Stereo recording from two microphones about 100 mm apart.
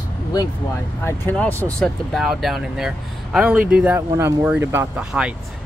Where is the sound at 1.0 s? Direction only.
25° left (ahead or behind).